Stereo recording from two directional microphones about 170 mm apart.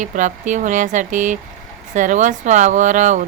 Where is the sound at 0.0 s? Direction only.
45° right (ahead or behind).